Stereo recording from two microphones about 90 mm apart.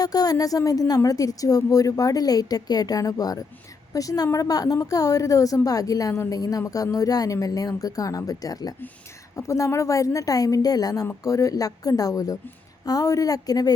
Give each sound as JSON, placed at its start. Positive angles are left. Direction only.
{"t": 0.0, "sound": "a woman's voice", "side_deg": 45}